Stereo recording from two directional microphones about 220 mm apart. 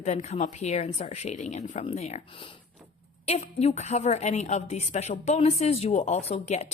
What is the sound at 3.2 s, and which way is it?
A woman's voice, 30° left (ahead or behind).